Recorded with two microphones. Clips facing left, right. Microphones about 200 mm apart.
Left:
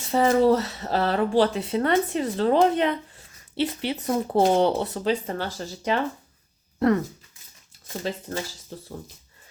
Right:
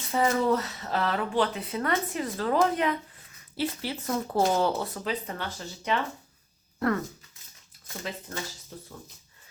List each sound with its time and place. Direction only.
0.1 s speech: 30° left (ahead or behind)
6.7 s speech: 20° left (ahead or behind)
8.0 s speech: 30° left (ahead or behind)